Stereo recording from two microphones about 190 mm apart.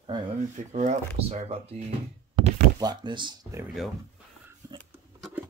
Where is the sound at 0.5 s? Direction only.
40° right (ahead or behind).